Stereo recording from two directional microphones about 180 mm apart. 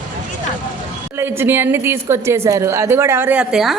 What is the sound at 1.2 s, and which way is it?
A woman's voice, 10° right (ahead or behind).